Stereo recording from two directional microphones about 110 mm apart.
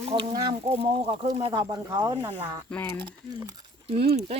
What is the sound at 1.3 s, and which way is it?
Speech, 35° right (ahead or behind).